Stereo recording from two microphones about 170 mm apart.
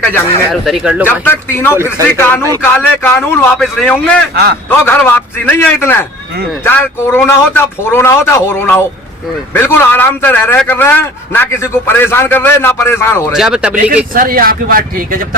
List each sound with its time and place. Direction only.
0.0 s a man's voice: 10° left (ahead or behind)
0.6 s a man's voice: centre (ahead or behind)
1.2 s a man's voice: 15° left (ahead or behind)
13.3 s a man's voice: 5° right (ahead or behind)
13.9 s speech: 55° right (ahead or behind)